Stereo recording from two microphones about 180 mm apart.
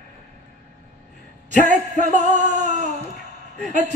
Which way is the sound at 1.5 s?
40° right (ahead or behind).